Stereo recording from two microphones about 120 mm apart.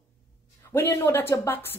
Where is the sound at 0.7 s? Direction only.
20° left (ahead or behind).